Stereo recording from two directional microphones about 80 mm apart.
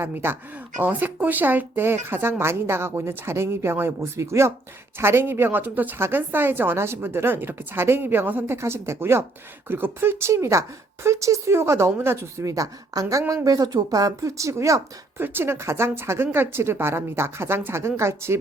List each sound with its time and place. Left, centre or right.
0.0 s a woman's voice: right
15.2 s a woman's voice: right